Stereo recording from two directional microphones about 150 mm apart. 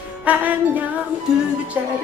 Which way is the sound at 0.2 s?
10° right (ahead or behind).